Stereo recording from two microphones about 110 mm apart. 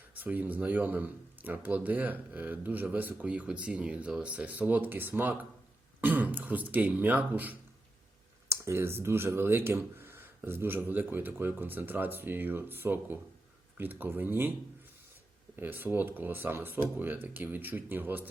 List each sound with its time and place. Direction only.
0.2 s speech: 15° right (ahead or behind)
15.5 s speech: 15° right (ahead or behind)